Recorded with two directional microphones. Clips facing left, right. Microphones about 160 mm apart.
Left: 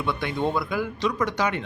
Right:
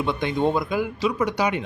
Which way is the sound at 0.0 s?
20° right (ahead or behind).